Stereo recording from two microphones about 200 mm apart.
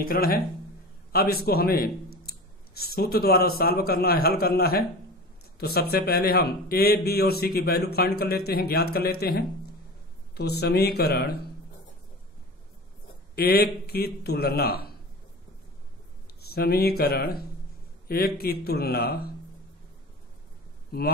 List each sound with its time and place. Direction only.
0.0 s a man's voice: 45° left (ahead or behind)
10.3 s a man's voice: 55° left (ahead or behind)
13.3 s a man's voice: 50° left (ahead or behind)
16.3 s a man's voice: 50° left (ahead or behind)